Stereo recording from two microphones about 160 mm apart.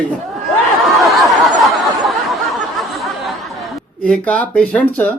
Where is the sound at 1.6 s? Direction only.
Centre (ahead or behind).